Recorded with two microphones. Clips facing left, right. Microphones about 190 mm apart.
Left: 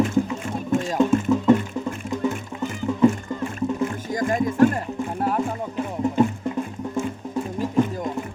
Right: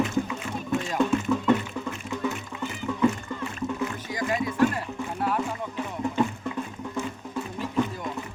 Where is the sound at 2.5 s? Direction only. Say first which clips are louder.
Left 5 dB; 45° left (ahead or behind).